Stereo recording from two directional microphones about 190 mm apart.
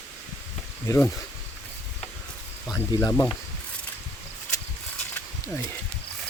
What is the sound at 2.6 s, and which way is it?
Speech, 15° left (ahead or behind).